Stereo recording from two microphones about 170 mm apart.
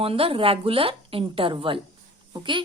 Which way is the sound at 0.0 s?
35° right (ahead or behind).